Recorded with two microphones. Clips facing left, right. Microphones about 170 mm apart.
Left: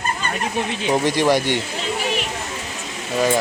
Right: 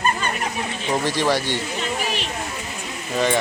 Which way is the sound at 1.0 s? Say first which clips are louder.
Left 4 dB; 15° left (ahead or behind).